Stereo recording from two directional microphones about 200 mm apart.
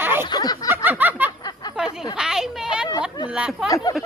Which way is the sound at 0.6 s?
10° right (ahead or behind).